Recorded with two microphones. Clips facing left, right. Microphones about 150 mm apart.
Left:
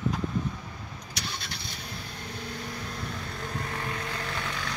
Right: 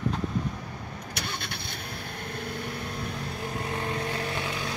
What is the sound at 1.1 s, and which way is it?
Vehicle, 55° right (ahead or behind).